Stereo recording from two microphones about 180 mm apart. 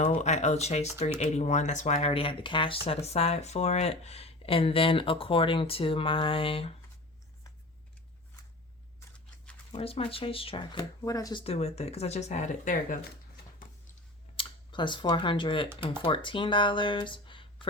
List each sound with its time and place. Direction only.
0.0 s speech: 40° left (ahead or behind)
9.7 s speech: 30° left (ahead or behind); by 13.4 s 50° left (ahead or behind)
14.3 s speech: 25° left (ahead or behind)